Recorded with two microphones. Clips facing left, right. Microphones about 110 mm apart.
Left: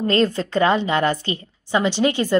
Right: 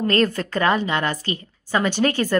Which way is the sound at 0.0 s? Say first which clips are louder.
Left 1 dB; 30° left (ahead or behind).